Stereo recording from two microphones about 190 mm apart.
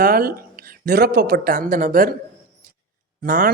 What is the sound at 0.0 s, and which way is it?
Speech, 50° right (ahead or behind).